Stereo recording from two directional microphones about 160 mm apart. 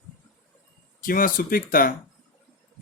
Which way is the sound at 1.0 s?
60° left (ahead or behind).